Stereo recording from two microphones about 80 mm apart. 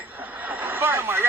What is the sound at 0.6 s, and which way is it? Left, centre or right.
Vehicle, right.